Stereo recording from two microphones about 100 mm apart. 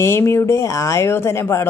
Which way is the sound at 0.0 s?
25° left (ahead or behind).